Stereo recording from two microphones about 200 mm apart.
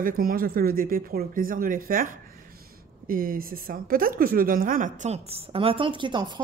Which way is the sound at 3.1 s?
45° right (ahead or behind).